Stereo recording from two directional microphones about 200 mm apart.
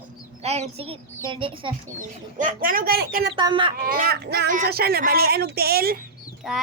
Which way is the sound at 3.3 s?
25° right (ahead or behind).